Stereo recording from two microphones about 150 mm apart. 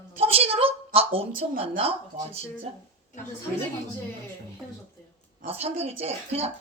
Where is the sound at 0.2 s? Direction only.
40° right (ahead or behind).